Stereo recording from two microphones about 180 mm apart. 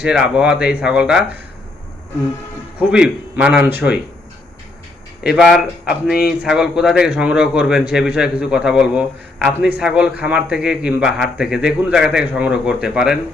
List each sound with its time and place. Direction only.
0.0 s speech: 5° right (ahead or behind)
2.7 s speech: 5° right (ahead or behind)
5.2 s speech: 5° right (ahead or behind)